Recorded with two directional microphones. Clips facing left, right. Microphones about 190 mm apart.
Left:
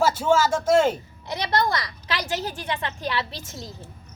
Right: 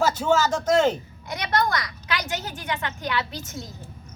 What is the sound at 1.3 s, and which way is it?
A woman's voice, 30° left (ahead or behind).